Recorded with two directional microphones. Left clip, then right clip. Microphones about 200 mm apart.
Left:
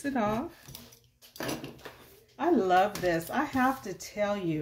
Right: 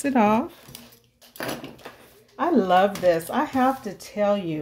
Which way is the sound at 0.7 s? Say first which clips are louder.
Right 5 dB; 15° right (ahead or behind).